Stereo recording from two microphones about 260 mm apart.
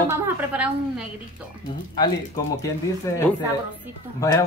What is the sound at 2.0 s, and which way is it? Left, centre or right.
Speech, centre.